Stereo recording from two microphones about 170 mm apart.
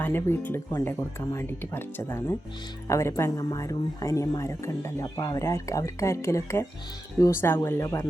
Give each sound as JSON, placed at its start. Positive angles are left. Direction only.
{"t": 0.0, "sound": "speech", "side_deg": 15}